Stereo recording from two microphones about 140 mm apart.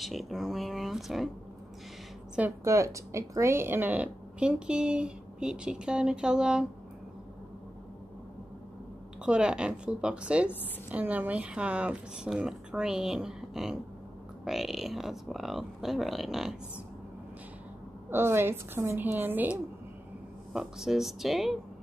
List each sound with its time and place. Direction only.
0.0 s speech: centre (ahead or behind)
2.6 s a woman's voice: 20° right (ahead or behind); by 6.6 s 5° right (ahead or behind)
9.2 s a woman's voice: 5° right (ahead or behind)
18.1 s a woman's voice: 15° right (ahead or behind); by 21.5 s centre (ahead or behind)